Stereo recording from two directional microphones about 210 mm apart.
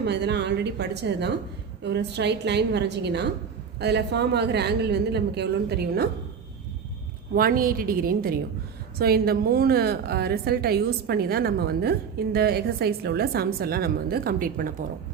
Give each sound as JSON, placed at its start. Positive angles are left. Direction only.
{"t": 0.0, "sound": "a woman's voice", "side_deg": -55}
{"t": 7.3, "sound": "a woman's voice", "side_deg": -45}